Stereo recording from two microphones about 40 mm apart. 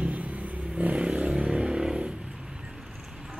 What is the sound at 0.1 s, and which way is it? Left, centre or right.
Vehicle, right.